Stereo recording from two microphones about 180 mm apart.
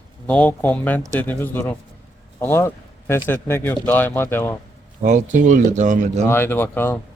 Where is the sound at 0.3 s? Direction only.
10° left (ahead or behind).